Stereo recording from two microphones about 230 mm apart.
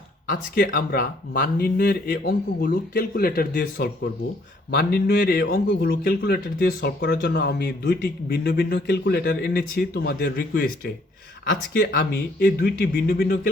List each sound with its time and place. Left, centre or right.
0.3 s a man's voice: left